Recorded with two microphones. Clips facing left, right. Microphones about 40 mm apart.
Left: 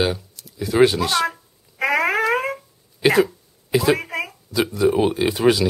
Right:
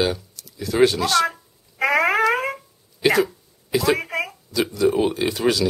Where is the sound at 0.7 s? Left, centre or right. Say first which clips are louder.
Left 1 dB; centre.